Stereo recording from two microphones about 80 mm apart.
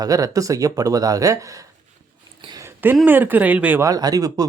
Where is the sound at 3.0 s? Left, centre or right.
Right.